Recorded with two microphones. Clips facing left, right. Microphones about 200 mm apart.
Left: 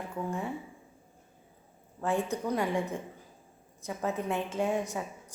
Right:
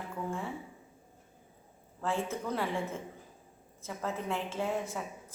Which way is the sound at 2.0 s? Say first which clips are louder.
Left 3 dB; 15° left (ahead or behind).